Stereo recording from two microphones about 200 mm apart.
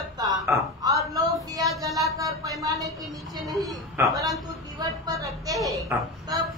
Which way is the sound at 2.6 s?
15° right (ahead or behind).